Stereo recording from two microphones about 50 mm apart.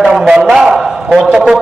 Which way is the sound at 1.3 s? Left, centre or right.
Centre.